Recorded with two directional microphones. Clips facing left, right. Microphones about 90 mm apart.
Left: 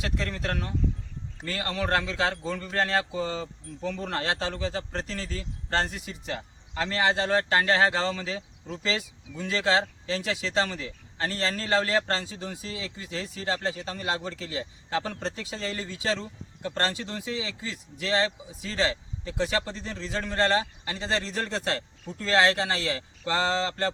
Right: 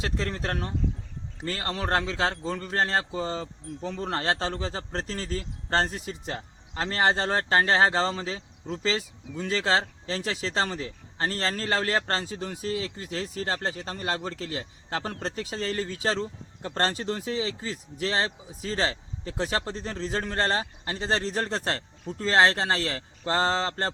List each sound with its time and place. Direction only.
0.0 s speech: 35° right (ahead or behind)